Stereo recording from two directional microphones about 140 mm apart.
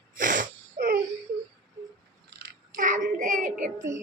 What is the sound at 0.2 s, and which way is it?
Sneeze, 75° right (ahead or behind).